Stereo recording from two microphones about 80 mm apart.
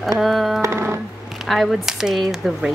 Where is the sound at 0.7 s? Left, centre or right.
Right.